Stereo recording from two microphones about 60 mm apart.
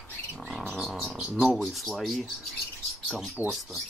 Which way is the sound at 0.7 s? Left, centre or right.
Centre.